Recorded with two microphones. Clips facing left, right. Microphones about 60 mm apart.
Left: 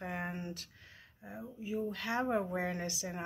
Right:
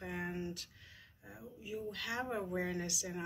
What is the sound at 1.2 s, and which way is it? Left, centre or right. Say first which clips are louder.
Speech: left 6 dB; left.